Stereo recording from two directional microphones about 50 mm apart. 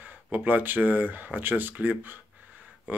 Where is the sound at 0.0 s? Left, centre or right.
Right.